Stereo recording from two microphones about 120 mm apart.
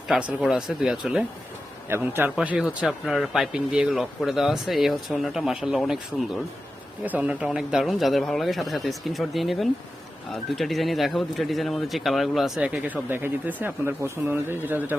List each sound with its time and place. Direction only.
0.1 s speech: 5° right (ahead or behind)
1.9 s a man's voice: 15° right (ahead or behind); by 6.2 s centre (ahead or behind)
7.0 s speech: 15° right (ahead or behind)